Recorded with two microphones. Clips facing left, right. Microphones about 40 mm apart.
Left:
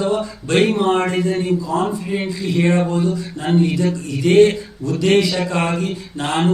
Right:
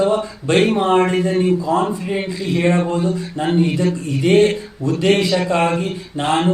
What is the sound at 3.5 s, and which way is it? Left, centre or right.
Speech, centre.